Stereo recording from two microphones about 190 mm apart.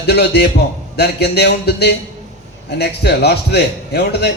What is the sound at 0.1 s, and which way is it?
A man's voice, 60° left (ahead or behind).